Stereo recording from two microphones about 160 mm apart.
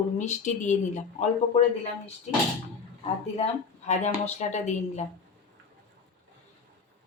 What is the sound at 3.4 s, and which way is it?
Speech, 45° left (ahead or behind).